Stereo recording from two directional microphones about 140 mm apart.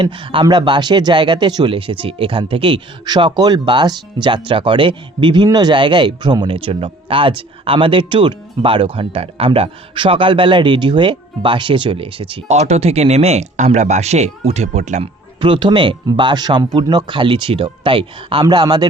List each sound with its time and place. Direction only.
0.0 s speech: 40° right (ahead or behind); by 15.1 s 55° right (ahead or behind)
15.4 s speech: 35° right (ahead or behind)